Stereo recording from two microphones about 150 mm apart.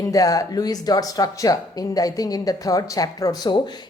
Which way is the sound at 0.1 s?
25° left (ahead or behind).